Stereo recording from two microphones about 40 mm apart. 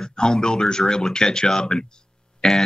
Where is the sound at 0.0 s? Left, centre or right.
Centre.